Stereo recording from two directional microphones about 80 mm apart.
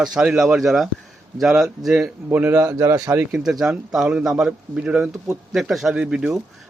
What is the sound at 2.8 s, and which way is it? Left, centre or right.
Speech, right.